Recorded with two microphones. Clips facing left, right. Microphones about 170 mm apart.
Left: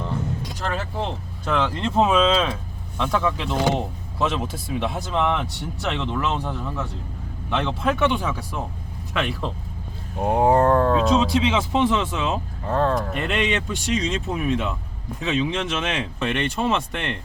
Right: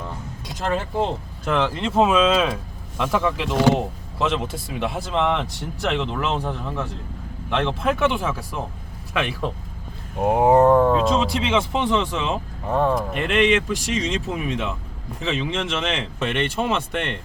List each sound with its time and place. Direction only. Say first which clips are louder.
1.5 s speech: right 1 dB; 5° right (ahead or behind)
10.2 s speech: right 2 dB; 20° right (ahead or behind)
10.9 s speech: left 1 dB; centre (ahead or behind)
12.6 s speech: right 1 dB; 15° right (ahead or behind)
13.1 s speech: right 4 dB; centre (ahead or behind)